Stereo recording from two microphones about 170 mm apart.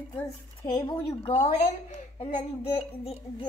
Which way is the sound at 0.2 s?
25° left (ahead or behind).